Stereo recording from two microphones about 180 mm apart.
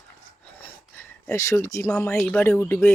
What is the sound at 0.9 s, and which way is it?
Speech, 15° left (ahead or behind).